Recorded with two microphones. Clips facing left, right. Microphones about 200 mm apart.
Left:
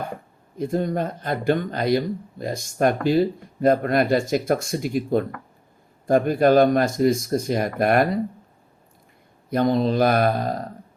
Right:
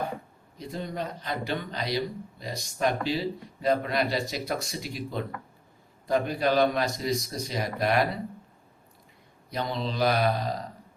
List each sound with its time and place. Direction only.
0.5 s speech: 50° left (ahead or behind)
9.5 s speech: 50° left (ahead or behind)